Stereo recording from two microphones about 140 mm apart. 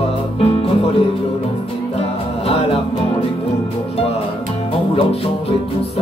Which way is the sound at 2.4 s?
45° left (ahead or behind).